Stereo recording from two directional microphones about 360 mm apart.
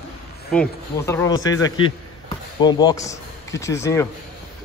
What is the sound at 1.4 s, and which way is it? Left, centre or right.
Speech, left.